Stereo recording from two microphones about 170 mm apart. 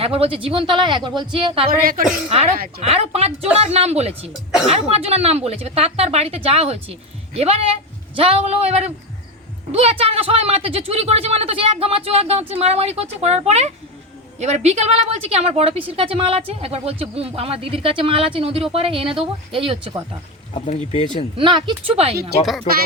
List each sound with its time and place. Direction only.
0.0 s speech: 35° right (ahead or behind)
1.8 s a woman's voice: 55° right (ahead or behind)
2.3 s a woman's voice: 35° right (ahead or behind)
20.5 s speech: 35° left (ahead or behind)
21.3 s a woman's voice: 30° right (ahead or behind)